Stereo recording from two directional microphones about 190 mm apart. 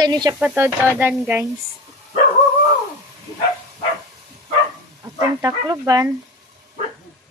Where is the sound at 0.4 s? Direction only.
10° right (ahead or behind).